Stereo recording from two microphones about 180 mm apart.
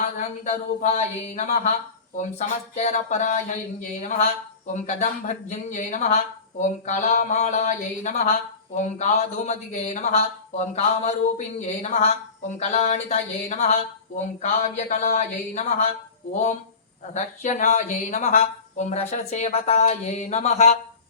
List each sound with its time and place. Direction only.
0.0 s speech: 45° left (ahead or behind)
17.2 s speech: 40° left (ahead or behind)